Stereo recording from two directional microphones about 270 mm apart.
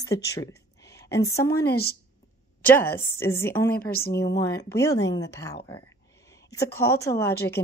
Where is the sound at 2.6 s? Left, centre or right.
Centre.